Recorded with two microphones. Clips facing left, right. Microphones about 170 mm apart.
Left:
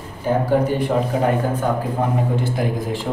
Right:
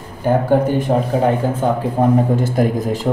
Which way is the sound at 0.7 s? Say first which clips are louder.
Right 3 dB; 45° right (ahead or behind).